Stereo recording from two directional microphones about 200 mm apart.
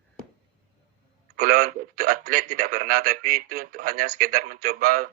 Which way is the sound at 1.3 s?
40° right (ahead or behind).